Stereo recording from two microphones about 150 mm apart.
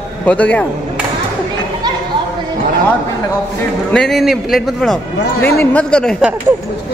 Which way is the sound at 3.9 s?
5° left (ahead or behind).